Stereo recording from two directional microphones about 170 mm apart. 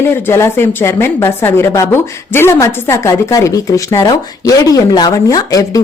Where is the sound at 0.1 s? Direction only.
15° left (ahead or behind).